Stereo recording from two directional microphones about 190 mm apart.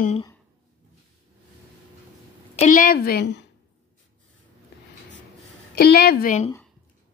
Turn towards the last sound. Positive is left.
turn(degrees=45)  # may be behind; listen again after turning